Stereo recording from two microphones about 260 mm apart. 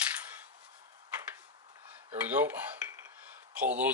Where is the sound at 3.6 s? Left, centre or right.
Centre.